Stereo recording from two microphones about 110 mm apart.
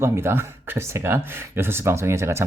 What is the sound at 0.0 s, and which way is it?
Speech, 25° right (ahead or behind).